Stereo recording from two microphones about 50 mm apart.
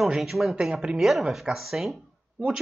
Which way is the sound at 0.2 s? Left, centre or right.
Centre.